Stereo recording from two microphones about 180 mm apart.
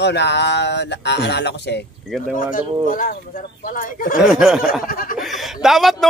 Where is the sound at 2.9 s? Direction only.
50° left (ahead or behind).